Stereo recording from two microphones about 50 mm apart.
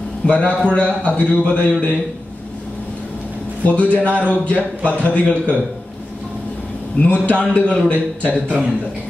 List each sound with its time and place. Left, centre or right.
0.3 s a man's voice: left
3.6 s a man's voice: left
7.0 s a man's voice: left